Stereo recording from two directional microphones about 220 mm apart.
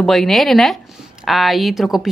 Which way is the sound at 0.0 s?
Centre (ahead or behind).